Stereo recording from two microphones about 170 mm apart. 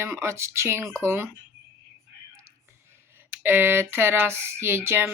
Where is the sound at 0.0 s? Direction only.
15° right (ahead or behind).